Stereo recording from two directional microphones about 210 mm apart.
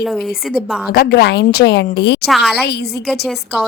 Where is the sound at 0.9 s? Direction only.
50° left (ahead or behind).